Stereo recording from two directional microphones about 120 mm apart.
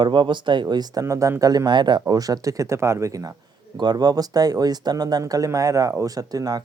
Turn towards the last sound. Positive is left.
turn(degrees=-30)  # may be behind; listen again after turning